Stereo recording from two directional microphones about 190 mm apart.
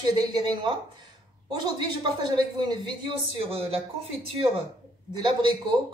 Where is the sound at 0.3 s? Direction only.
25° right (ahead or behind).